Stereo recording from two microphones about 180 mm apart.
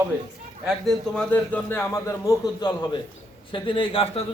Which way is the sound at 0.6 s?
5° left (ahead or behind).